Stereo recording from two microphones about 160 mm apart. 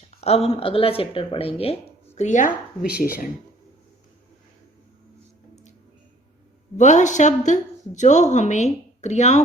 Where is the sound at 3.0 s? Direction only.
65° left (ahead or behind).